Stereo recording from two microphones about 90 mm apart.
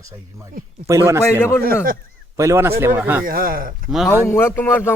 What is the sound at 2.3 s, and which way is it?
Speech, 30° right (ahead or behind).